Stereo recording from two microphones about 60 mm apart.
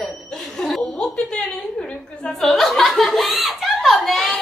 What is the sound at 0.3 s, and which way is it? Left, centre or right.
Laughter, centre.